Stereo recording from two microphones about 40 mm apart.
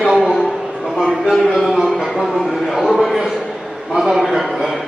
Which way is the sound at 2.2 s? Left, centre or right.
Centre.